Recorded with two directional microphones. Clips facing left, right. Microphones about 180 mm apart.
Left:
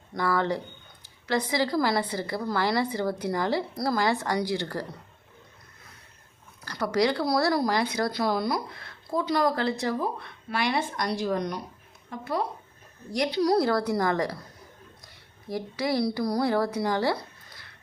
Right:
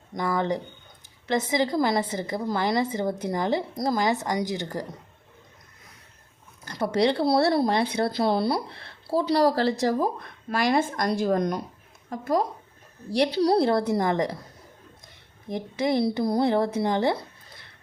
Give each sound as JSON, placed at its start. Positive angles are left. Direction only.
{"t": 0.1, "sound": "a woman's voice", "side_deg": -20}
{"t": 6.7, "sound": "a woman's voice", "side_deg": -25}
{"t": 13.1, "sound": "a woman's voice", "side_deg": -30}
{"t": 15.4, "sound": "a woman's voice", "side_deg": -20}